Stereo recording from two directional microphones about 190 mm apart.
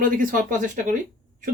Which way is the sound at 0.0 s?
45° right (ahead or behind).